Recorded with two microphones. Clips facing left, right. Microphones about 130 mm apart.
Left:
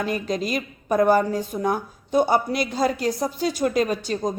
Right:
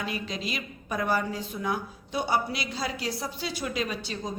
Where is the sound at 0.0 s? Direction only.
45° left (ahead or behind).